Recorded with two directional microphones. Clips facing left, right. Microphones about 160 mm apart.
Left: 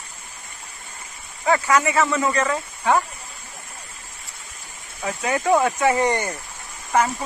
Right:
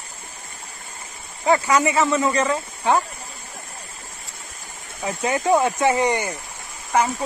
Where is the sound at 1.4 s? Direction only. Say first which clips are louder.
Right 1 dB; 20° right (ahead or behind).